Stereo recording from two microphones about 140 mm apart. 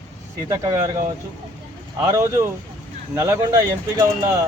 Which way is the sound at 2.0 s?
25° right (ahead or behind).